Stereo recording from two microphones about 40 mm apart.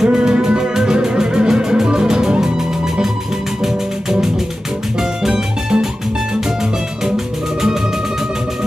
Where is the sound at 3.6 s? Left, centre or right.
Centre.